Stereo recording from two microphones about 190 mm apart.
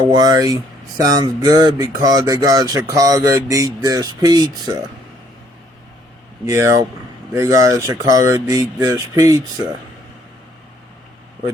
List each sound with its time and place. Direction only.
0.0 s speech: 20° right (ahead or behind)
6.4 s speech: 15° right (ahead or behind)